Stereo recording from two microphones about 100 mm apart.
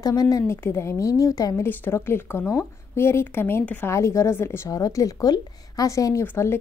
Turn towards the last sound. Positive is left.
turn(degrees=25)  # may be behind; listen again after turning